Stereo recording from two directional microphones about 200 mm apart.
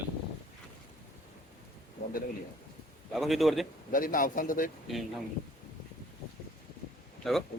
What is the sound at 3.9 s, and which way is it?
Speech, 45° left (ahead or behind).